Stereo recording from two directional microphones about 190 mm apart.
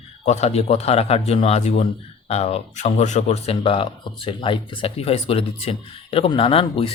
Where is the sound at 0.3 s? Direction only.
35° left (ahead or behind).